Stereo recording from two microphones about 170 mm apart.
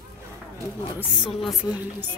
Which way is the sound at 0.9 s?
5° right (ahead or behind).